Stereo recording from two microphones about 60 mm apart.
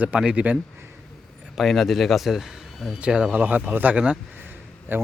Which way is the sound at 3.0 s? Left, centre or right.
Centre.